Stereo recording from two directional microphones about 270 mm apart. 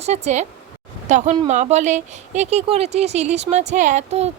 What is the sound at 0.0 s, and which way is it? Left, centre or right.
Speech, right.